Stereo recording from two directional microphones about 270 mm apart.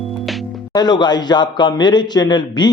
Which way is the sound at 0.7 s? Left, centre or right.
Centre.